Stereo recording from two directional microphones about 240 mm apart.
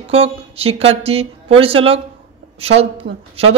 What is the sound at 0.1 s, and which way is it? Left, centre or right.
Speech, right.